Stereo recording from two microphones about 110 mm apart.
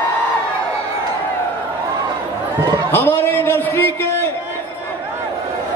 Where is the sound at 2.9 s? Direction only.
20° left (ahead or behind).